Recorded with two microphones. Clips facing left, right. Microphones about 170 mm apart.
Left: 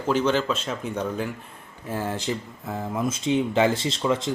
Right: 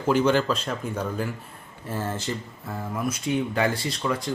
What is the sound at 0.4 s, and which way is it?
Speech, 5° left (ahead or behind).